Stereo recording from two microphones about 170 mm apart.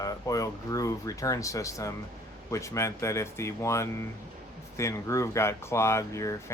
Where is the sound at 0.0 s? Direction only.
20° left (ahead or behind).